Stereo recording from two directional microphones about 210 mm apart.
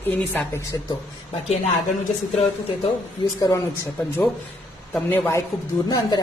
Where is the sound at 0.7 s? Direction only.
15° left (ahead or behind).